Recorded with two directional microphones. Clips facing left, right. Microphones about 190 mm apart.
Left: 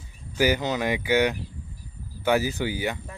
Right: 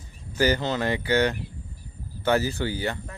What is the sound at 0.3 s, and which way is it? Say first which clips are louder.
Speech: even; 15° left (ahead or behind).